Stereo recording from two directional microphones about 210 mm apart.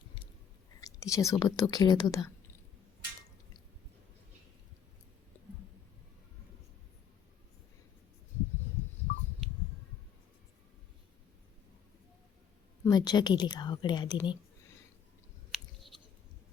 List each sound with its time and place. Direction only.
0.8 s whispering: 15° left (ahead or behind)
1.1 s speech: 15° left (ahead or behind)
12.8 s a woman's voice: 20° left (ahead or behind)
15.5 s clicking: centre (ahead or behind)